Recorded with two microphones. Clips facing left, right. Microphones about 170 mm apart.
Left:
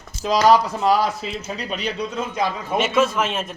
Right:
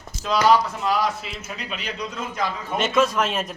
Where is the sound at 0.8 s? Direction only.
35° left (ahead or behind).